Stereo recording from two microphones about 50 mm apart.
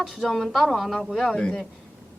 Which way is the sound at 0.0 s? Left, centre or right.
Centre.